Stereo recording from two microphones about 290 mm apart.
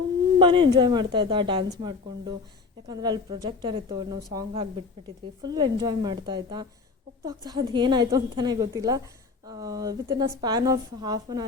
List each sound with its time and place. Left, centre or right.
0.3 s a woman's voice: centre